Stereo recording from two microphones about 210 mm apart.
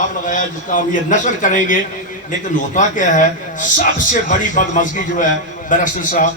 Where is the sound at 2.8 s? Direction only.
35° left (ahead or behind).